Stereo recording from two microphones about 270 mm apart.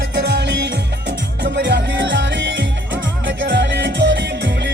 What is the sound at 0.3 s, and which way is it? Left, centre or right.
Music, right.